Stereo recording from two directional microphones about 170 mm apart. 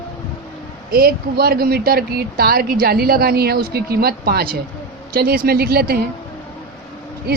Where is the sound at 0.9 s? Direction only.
60° right (ahead or behind).